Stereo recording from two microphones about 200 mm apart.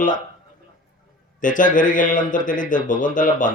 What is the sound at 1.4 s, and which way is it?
Speech, 40° left (ahead or behind).